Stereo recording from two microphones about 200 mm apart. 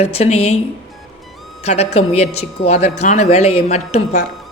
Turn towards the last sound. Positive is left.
turn(degrees=35)  # may be behind; listen again after turning